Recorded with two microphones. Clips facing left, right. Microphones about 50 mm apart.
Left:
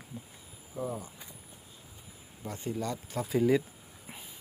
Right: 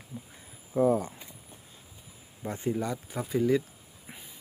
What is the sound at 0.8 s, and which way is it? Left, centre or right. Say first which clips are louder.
Speech: right 12 dB; right.